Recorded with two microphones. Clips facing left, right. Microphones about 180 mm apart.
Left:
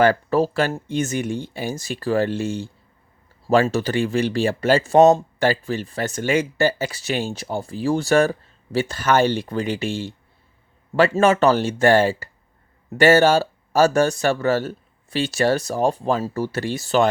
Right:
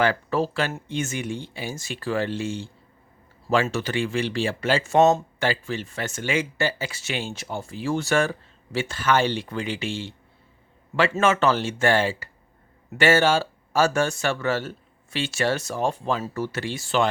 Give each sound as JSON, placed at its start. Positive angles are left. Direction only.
{"t": 0.0, "sound": "speech", "side_deg": 40}